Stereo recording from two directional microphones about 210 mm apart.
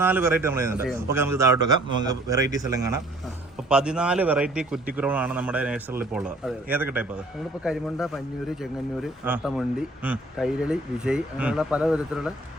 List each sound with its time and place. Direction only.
0.0 s a man's voice: 10° right (ahead or behind)
9.2 s speech: 5° right (ahead or behind)